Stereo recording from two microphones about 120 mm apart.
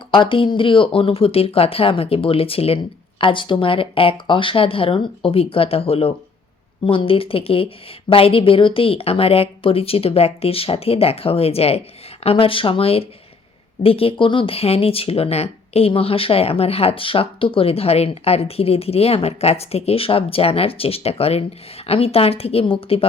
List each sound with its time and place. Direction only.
0.1 s speech: 45° left (ahead or behind)